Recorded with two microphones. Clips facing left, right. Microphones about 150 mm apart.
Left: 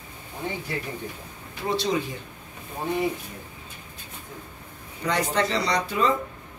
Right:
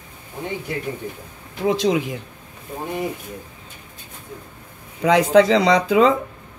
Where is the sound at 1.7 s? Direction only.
90° right.